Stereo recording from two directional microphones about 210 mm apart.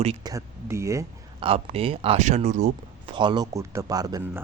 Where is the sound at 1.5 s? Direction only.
30° right (ahead or behind).